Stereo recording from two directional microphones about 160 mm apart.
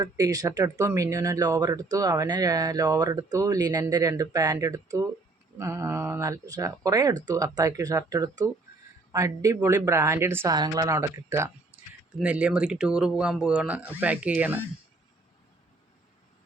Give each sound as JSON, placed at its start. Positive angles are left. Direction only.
{"t": 0.0, "sound": "speech", "side_deg": -25}